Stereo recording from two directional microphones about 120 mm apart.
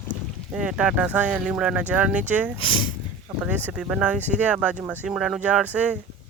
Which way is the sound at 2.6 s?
45° left (ahead or behind).